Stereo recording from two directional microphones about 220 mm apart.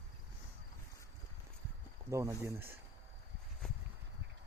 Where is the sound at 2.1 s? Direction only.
15° right (ahead or behind).